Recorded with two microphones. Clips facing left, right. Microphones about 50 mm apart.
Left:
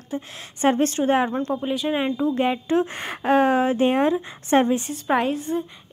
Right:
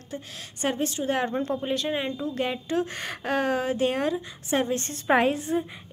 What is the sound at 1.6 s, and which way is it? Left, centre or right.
Speech, centre.